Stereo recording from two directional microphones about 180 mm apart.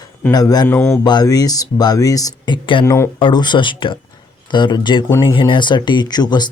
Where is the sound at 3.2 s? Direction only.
25° left (ahead or behind).